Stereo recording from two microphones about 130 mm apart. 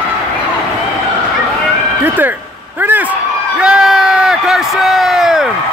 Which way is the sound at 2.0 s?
15° right (ahead or behind).